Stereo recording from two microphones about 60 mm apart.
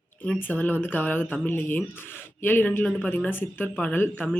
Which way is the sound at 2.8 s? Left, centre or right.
Left.